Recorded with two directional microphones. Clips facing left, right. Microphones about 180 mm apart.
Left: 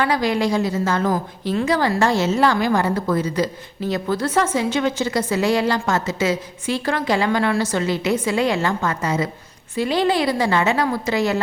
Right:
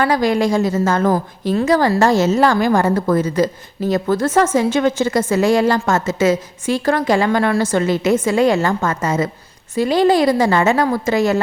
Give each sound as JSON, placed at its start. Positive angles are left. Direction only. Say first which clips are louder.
{"t": 0.0, "sound": "a woman's voice", "louder": "right 4 dB", "side_deg": -45}